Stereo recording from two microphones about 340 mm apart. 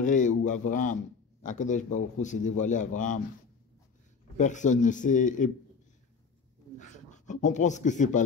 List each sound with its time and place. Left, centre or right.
0.0 s speech: left
4.4 s speech: left
6.8 s a sound: left